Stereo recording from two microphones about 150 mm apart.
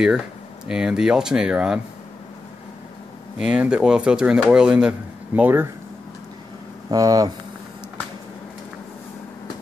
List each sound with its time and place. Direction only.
0.7 s speech: 5° right (ahead or behind)
3.3 s speech: 5° right (ahead or behind)
6.9 s speech: 25° right (ahead or behind)